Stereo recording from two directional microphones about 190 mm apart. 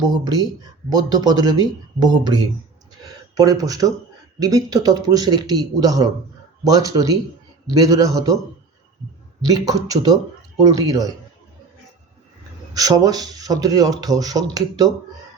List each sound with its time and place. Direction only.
0.3 s speech: 20° right (ahead or behind)
9.5 s speech: 20° right (ahead or behind)
12.7 s speech: 20° right (ahead or behind)